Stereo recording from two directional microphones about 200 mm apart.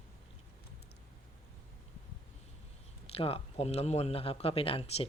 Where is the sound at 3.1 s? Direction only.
30° left (ahead or behind).